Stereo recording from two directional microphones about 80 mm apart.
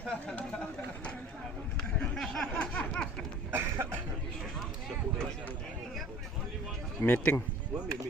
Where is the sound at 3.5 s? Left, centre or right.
Right.